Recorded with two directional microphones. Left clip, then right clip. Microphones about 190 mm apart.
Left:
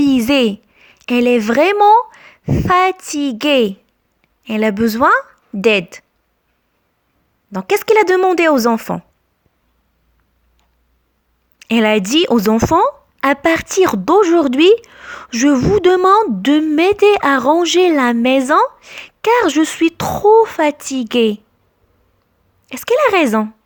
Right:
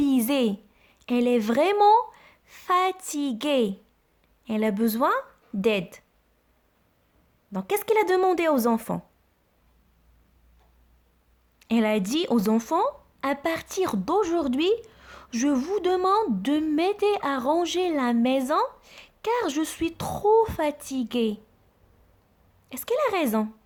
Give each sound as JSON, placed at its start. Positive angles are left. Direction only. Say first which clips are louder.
{"t": 0.0, "sound": "a woman's voice", "louder": "left 10 dB", "side_deg": 20}
{"t": 7.5, "sound": "speech", "louder": "left 11 dB", "side_deg": 25}
{"t": 11.6, "sound": "speech", "louder": "left 11 dB", "side_deg": 25}
{"t": 22.6, "sound": "speech", "louder": "left 12 dB", "side_deg": 25}